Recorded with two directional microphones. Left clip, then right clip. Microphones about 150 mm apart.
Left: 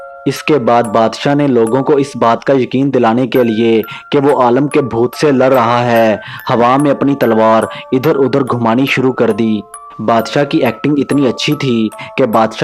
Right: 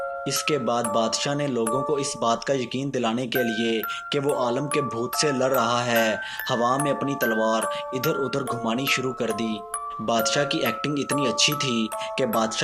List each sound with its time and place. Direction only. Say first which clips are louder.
0.3 s speech: left 15 dB; 50° left (ahead or behind)